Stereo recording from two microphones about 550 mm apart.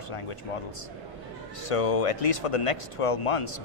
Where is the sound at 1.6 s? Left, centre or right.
Left.